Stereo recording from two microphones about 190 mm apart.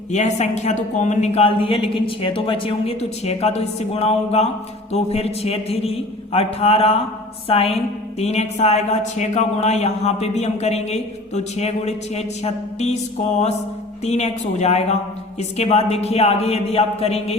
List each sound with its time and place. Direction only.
0.1 s speech: 35° left (ahead or behind)
14.0 s speech: 35° left (ahead or behind)